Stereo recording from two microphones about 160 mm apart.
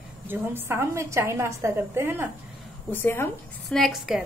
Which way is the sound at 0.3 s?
15° right (ahead or behind).